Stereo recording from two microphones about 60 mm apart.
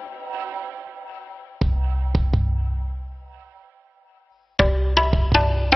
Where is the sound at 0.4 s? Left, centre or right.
Right.